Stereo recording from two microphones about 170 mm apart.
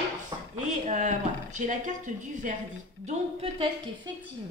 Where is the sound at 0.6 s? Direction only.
45° right (ahead or behind).